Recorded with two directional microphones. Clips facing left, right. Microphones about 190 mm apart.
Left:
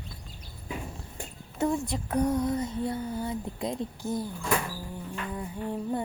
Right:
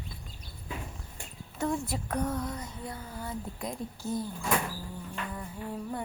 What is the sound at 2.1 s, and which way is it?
Speech, 15° left (ahead or behind).